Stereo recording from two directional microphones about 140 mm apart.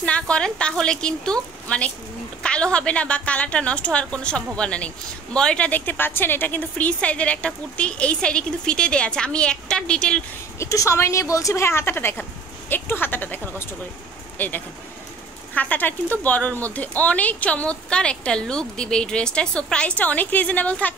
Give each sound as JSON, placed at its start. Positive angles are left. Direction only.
{"t": 0.0, "sound": "speech", "side_deg": 10}
{"t": 10.6, "sound": "speech", "side_deg": 20}